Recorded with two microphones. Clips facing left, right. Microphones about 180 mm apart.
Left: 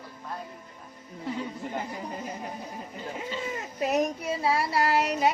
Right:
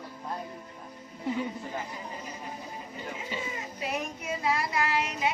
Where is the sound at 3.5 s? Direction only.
45° left (ahead or behind).